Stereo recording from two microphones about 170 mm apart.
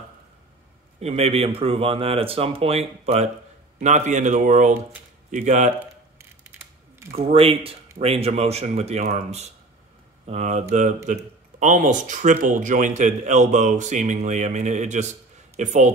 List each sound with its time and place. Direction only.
0.9 s a man's voice: 35° right (ahead or behind)
7.1 s a man's voice: 35° right (ahead or behind)